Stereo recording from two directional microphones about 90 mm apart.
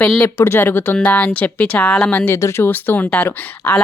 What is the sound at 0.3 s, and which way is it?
Speech, 30° left (ahead or behind).